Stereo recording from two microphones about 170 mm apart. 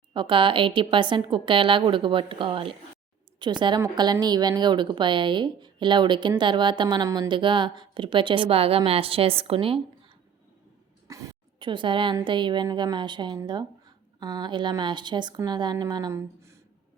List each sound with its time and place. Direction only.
0.1 s speech: 30° right (ahead or behind)
11.1 s speech: 20° right (ahead or behind)